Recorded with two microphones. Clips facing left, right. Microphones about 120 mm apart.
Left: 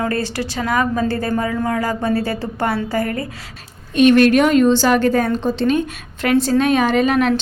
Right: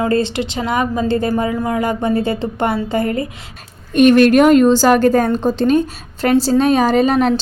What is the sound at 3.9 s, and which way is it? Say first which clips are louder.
A woman's voice: right 2 dB; 45° right (ahead or behind).